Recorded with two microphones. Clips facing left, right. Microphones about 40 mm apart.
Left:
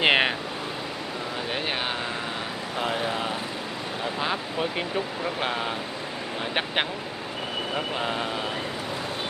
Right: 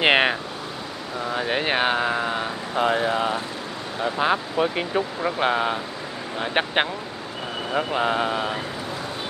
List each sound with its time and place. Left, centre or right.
0.0 s a sound: centre
1.3 s vehicle: right
4.0 s speech: centre